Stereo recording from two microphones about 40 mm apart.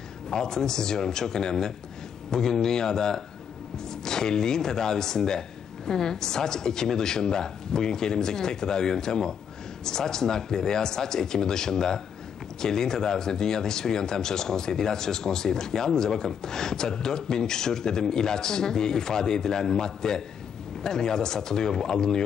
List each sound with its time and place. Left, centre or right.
0.3 s speech: centre